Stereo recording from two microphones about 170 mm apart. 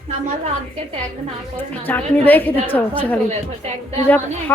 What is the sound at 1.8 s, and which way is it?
A woman's voice, 10° left (ahead or behind).